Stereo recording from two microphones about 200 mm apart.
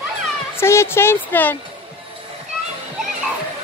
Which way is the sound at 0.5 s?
15° left (ahead or behind).